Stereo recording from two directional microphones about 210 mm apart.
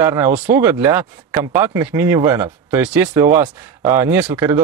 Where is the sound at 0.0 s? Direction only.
10° right (ahead or behind).